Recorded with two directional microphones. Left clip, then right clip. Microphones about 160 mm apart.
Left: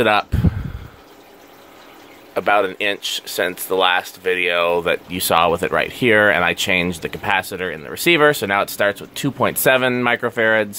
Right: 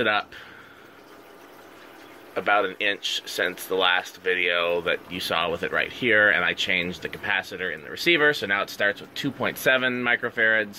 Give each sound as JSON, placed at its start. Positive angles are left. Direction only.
{"t": 0.0, "sound": "speech", "side_deg": 45}
{"t": 2.3, "sound": "speech", "side_deg": 45}